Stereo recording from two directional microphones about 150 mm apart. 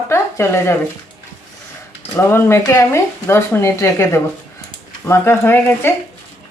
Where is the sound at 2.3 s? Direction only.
15° left (ahead or behind).